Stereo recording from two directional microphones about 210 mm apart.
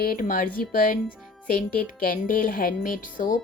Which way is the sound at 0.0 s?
40° left (ahead or behind).